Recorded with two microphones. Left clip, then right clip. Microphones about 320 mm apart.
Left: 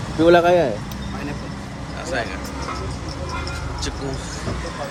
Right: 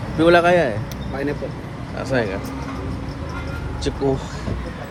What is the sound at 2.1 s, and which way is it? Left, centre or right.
Speech, centre.